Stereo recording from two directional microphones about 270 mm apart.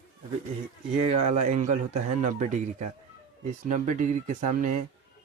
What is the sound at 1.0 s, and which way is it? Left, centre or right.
Speech, right.